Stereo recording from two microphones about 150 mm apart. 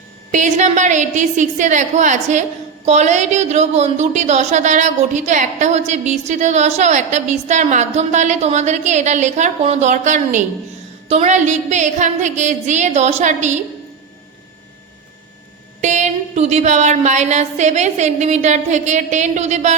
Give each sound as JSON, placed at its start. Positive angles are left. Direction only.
{"t": 0.3, "sound": "a woman's voice", "side_deg": -55}
{"t": 15.8, "sound": "speech", "side_deg": -50}